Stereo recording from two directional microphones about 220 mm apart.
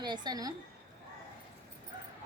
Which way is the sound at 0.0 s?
20° right (ahead or behind).